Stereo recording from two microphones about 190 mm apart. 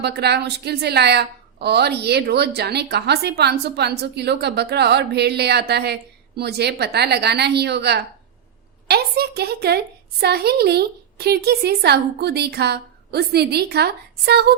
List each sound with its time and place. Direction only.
0.0 s a woman's voice: 60° right (ahead or behind)